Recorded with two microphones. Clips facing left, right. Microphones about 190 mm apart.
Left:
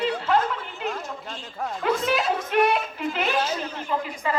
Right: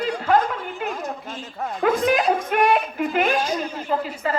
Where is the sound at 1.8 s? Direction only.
50° right (ahead or behind).